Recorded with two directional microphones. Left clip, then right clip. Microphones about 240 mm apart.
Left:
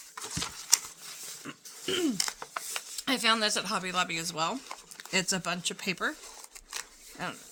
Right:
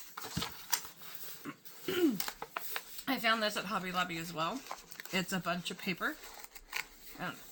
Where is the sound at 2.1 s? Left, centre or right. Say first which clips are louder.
Left 6 dB; left.